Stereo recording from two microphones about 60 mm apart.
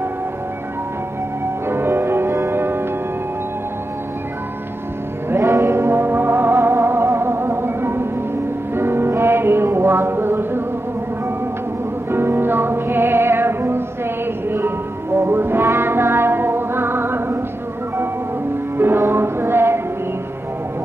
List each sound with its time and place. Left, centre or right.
1.7 s music: right
5.4 s music: right
12.1 s music: right
18.8 s music: right